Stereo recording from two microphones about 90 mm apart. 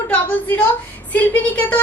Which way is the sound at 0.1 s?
20° left (ahead or behind).